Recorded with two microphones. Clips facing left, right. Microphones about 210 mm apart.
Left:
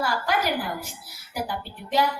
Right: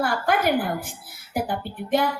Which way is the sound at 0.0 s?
55° right (ahead or behind).